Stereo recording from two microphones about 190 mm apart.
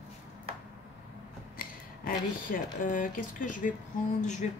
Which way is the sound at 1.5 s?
45° left (ahead or behind).